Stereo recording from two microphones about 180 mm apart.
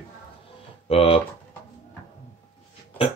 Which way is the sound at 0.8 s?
30° left (ahead or behind).